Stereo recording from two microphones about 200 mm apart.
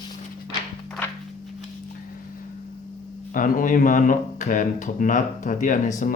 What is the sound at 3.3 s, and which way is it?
Speech, 40° left (ahead or behind).